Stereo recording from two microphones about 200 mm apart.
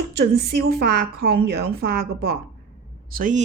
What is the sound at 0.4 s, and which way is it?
A woman's voice, 50° right (ahead or behind).